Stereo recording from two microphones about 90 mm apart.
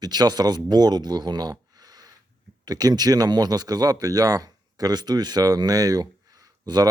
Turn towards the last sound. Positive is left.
turn(degrees=-45)  # may be behind; listen again after turning